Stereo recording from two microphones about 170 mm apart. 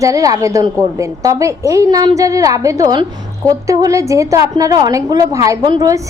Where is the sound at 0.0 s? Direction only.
20° right (ahead or behind).